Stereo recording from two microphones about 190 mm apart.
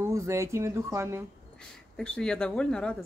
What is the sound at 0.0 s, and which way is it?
Speech, 15° right (ahead or behind).